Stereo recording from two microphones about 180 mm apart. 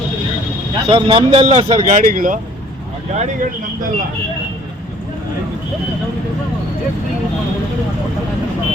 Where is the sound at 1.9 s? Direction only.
50° right (ahead or behind).